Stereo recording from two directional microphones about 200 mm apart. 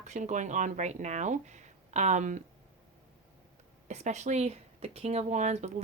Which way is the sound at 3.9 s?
35° right (ahead or behind).